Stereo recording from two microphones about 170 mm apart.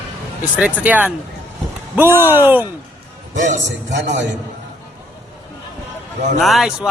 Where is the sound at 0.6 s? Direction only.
10° right (ahead or behind).